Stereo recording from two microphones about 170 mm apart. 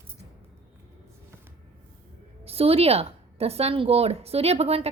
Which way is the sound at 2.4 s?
35° right (ahead or behind).